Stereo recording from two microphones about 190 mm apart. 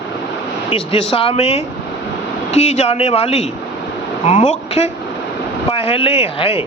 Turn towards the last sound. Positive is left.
turn(degrees=30)  # may be behind; listen again after turning